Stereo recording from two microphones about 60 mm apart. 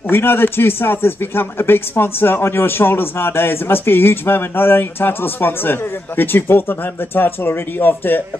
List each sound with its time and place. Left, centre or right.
0.1 s speech: left